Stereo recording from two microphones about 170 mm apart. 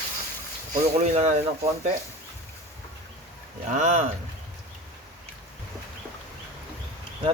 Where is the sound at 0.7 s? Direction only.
40° right (ahead or behind).